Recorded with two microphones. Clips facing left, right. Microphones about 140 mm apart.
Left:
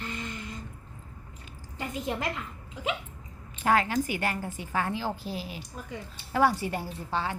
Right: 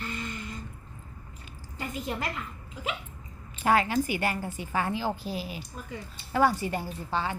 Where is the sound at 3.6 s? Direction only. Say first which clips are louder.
Right 1 dB; 10° right (ahead or behind).